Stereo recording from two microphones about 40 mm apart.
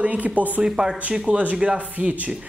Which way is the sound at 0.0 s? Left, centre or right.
Right.